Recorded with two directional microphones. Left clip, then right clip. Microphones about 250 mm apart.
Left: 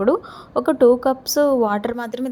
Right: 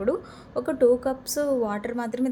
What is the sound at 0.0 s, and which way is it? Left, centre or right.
A woman's voice, centre.